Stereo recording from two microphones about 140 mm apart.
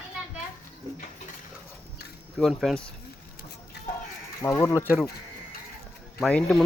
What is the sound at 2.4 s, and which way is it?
Speech, centre (ahead or behind).